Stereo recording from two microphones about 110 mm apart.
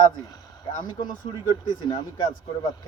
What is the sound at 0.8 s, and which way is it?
Speech, 40° left (ahead or behind).